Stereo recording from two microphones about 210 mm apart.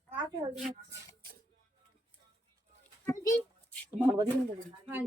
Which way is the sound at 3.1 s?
15° left (ahead or behind).